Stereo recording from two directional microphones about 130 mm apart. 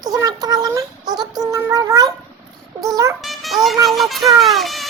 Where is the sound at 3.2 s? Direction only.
Centre (ahead or behind).